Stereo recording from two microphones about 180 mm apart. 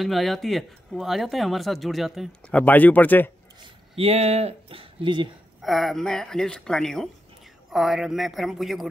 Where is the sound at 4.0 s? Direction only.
35° right (ahead or behind).